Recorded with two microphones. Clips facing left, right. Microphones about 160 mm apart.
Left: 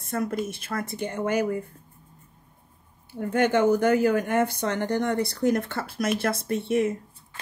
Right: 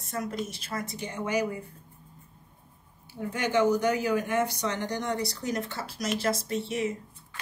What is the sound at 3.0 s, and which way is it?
Speech, 55° left (ahead or behind).